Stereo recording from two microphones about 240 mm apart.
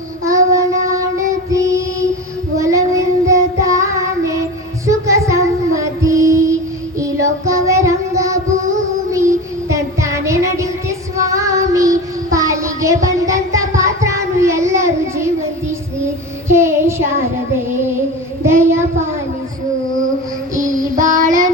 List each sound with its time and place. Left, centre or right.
0.3 s child singing: centre
16.5 s child singing: centre
18.4 s child singing: centre
20.6 s child singing: right